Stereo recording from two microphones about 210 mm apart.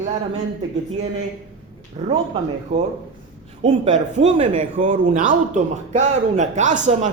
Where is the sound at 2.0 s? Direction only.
30° right (ahead or behind).